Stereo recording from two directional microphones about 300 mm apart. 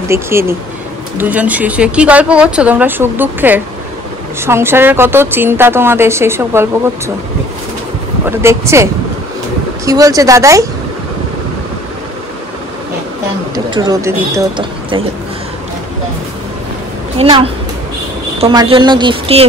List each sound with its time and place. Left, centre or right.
0.1 s a woman's voice: centre
8.3 s a woman's voice: centre
9.8 s a woman's voice: centre
13.7 s a woman's voice: centre
17.2 s a woman's voice: centre